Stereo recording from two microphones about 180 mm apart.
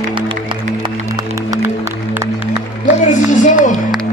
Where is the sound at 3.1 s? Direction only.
45° left (ahead or behind).